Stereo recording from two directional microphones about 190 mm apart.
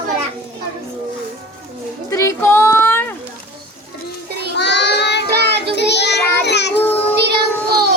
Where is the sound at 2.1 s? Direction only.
15° left (ahead or behind).